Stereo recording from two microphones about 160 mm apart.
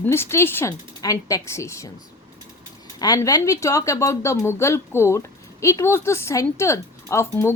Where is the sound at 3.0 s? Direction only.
25° left (ahead or behind).